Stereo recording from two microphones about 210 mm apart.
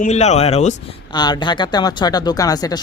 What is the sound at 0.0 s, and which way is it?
Speech, 30° left (ahead or behind).